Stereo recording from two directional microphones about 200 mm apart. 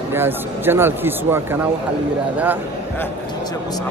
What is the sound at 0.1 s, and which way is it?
Speech, 10° right (ahead or behind).